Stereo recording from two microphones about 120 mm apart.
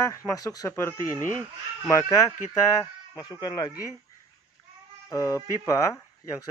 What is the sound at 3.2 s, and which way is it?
Speech, 35° left (ahead or behind).